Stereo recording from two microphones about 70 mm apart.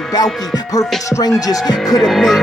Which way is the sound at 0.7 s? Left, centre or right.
Left.